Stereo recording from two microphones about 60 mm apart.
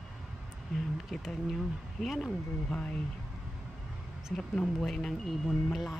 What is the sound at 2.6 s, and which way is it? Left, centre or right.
Speech, centre.